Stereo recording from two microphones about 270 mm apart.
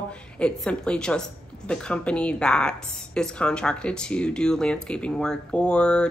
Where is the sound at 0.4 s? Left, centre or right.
Centre.